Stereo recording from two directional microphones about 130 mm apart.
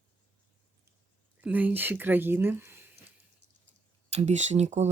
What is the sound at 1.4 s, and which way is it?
Speech, 15° right (ahead or behind).